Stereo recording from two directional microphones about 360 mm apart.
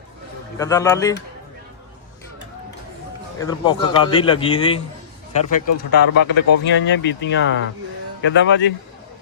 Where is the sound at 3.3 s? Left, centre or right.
Centre.